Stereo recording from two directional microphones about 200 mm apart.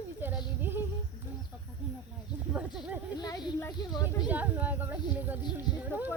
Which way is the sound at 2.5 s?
5° right (ahead or behind).